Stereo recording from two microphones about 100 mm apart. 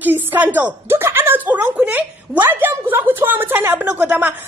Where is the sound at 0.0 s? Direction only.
20° right (ahead or behind).